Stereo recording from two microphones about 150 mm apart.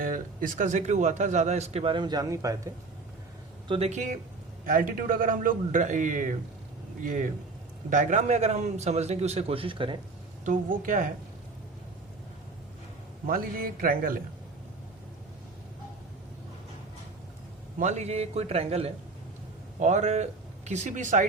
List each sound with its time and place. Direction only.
0.0 s a man's voice: 65° right (ahead or behind); by 2.7 s 20° right (ahead or behind)
3.7 s a man's voice: 45° right (ahead or behind)
10.4 s a man's voice: 60° right (ahead or behind)
13.2 s a man's voice: 70° right (ahead or behind)
17.7 s a man's voice: 50° right (ahead or behind)